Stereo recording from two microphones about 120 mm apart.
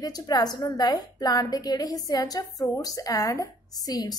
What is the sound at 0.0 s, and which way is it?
A woman's voice, 35° left (ahead or behind).